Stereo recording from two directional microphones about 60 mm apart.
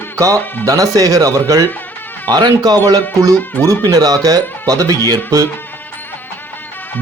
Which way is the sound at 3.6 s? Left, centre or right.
Right.